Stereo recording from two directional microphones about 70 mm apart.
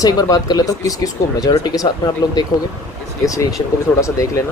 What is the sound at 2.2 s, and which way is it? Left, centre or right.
Speech, left.